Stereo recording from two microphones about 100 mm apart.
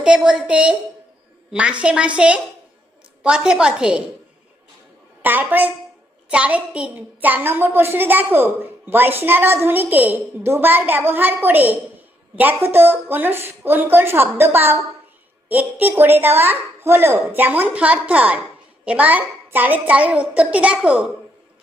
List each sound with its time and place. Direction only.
0.0 s a woman's voice: 10° right (ahead or behind)
5.2 s a woman's voice: 20° right (ahead or behind)